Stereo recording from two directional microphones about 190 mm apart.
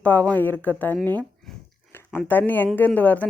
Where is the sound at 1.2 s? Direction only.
Centre (ahead or behind).